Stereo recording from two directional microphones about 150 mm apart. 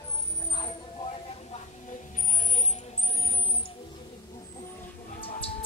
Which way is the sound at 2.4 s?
55° left (ahead or behind).